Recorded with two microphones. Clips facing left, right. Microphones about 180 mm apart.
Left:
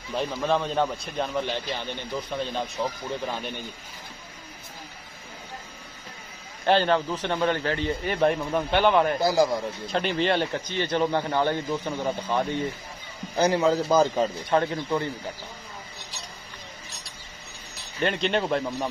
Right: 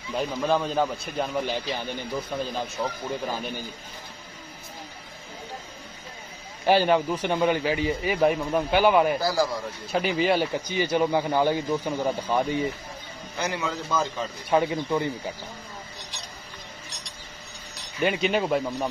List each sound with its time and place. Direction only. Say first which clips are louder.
0.1 s a man's voice: right 1 dB; centre (ahead or behind)
6.6 s speech: right 1 dB; 10° right (ahead or behind)
9.2 s speech: left 3 dB; 20° left (ahead or behind)
9.8 s speech: right 2 dB; 5° right (ahead or behind)
13.4 s a man's voice: left 8 dB; 35° left (ahead or behind)
14.5 s speech: right 5 dB; 10° right (ahead or behind)
18.0 s a man's voice: right 1 dB; 5° right (ahead or behind)